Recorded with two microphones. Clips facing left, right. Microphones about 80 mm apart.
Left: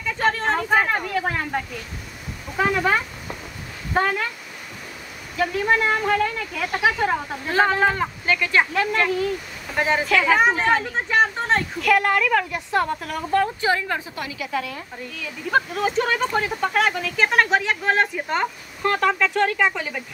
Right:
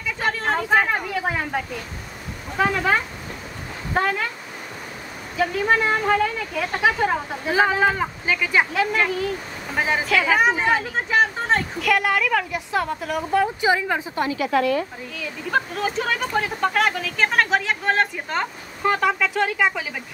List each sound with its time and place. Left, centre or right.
0.2 s a sound: centre
2.5 s speech: centre
5.4 s speech: centre
7.0 s speech: centre
14.1 s a woman's voice: right
14.5 s a woman's voice: right
15.1 s speech: centre